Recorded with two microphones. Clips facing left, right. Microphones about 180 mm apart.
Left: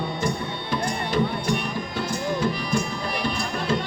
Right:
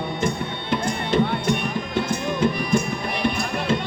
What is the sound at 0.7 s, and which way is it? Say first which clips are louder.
Music: right 3 dB; 25° right (ahead or behind).